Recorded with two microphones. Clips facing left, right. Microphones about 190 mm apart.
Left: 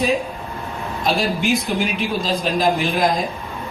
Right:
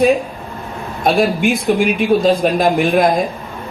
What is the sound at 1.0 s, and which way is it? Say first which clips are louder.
A man's voice: right 6 dB; 55° right (ahead or behind).